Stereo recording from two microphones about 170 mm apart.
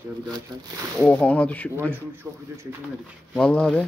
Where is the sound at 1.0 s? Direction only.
10° left (ahead or behind).